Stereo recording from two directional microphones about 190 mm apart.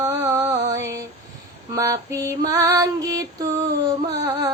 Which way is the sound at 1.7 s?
15° right (ahead or behind).